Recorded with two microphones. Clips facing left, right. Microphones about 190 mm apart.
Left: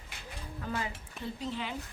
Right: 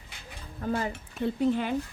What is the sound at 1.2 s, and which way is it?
Speech, 55° right (ahead or behind).